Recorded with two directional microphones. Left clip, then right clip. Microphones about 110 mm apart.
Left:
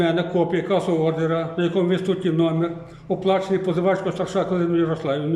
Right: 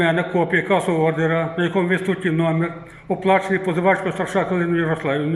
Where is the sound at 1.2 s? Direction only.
30° left (ahead or behind).